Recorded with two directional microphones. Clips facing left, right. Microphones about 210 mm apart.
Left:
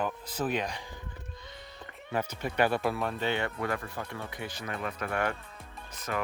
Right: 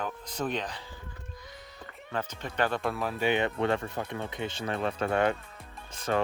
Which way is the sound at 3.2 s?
15° right (ahead or behind).